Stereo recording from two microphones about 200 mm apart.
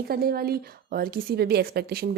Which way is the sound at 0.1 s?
50° right (ahead or behind).